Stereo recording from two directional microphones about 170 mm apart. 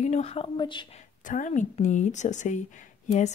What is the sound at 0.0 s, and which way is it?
Speech, 40° left (ahead or behind).